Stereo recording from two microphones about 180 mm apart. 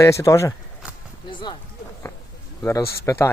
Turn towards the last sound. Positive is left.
turn(degrees=15)  # may be behind; listen again after turning